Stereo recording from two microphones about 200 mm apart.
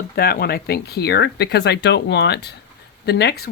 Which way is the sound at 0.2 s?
50° left (ahead or behind).